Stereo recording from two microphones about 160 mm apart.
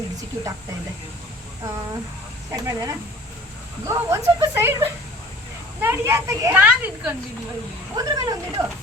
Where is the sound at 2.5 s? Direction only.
20° right (ahead or behind).